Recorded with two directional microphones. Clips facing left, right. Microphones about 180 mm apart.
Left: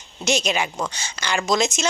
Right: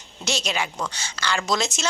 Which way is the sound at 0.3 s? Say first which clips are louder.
Left 5 dB; 20° left (ahead or behind).